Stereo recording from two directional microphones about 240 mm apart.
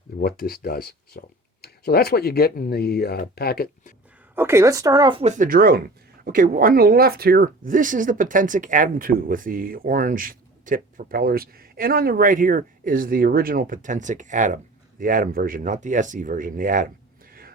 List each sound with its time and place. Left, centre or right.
0.2 s speech: left
4.4 s speech: centre; by 16.9 s right